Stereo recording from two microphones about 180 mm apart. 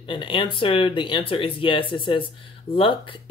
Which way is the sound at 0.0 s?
30° left (ahead or behind).